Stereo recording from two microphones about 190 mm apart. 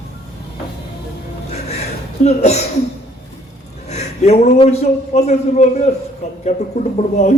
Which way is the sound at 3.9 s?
35° left (ahead or behind).